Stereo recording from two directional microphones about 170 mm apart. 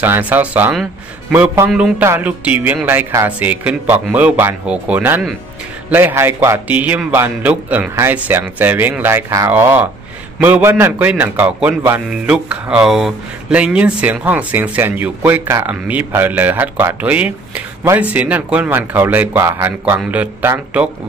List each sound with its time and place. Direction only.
0.0 s a man's voice: 10° right (ahead or behind)